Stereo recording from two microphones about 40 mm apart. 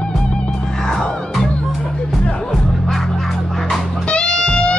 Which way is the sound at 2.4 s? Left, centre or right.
Centre.